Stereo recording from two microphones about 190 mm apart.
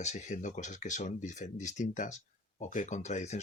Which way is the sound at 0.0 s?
40° left (ahead or behind).